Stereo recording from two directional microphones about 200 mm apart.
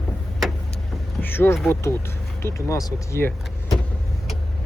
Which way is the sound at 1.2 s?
10° left (ahead or behind).